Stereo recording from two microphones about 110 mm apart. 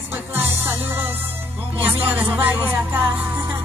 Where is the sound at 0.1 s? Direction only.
20° right (ahead or behind).